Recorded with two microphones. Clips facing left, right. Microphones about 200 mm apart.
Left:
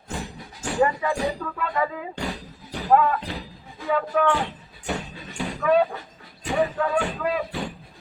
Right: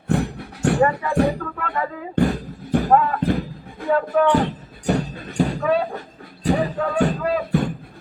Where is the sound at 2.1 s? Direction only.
55° right (ahead or behind).